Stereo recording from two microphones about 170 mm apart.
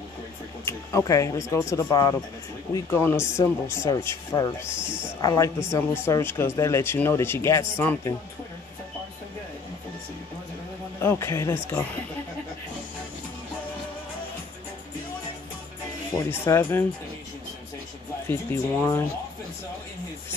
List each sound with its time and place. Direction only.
0.7 s speech: 20° left (ahead or behind)
2.7 s speech: 15° left (ahead or behind)
4.8 s a sound: 5° right (ahead or behind)
5.2 s speech: 20° left (ahead or behind)
11.0 s speech: 15° left (ahead or behind)
16.3 s speech: 15° left (ahead or behind)
18.3 s speech: 15° left (ahead or behind)